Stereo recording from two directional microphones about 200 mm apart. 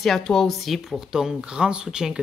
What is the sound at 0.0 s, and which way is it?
Speech, centre (ahead or behind).